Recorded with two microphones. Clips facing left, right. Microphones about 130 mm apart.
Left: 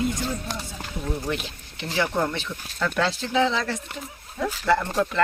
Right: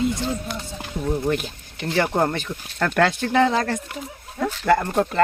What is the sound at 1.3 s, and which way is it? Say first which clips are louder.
Speech: right 5 dB; 50° right (ahead or behind).